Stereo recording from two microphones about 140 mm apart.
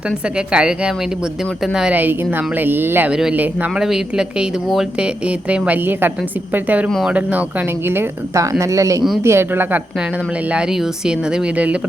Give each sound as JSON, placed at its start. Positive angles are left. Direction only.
{"t": 0.3, "sound": "speech", "side_deg": -5}
{"t": 10.5, "sound": "speech", "side_deg": -5}